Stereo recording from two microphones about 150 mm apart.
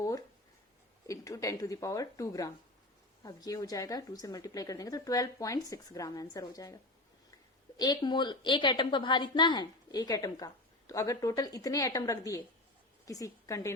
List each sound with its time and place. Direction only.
0.0 s a sound: 20° left (ahead or behind)
1.0 s a woman's voice: 20° left (ahead or behind)
7.8 s a woman's voice: 25° left (ahead or behind)